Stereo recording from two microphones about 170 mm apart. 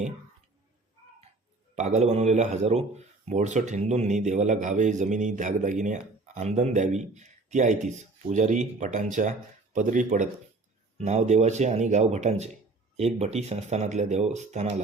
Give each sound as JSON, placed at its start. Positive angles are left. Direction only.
{"t": 1.7, "sound": "a man's voice", "side_deg": -40}